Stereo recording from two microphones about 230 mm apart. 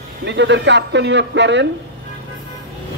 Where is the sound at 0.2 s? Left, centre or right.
Right.